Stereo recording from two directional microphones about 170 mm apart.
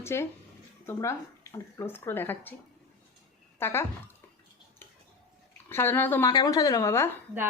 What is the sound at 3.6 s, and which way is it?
Speech, 15° left (ahead or behind).